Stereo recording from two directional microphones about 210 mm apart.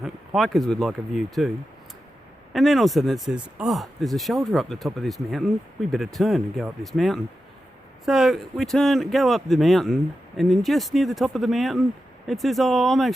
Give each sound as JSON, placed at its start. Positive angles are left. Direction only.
{"t": 0.0, "sound": "speech", "side_deg": 0}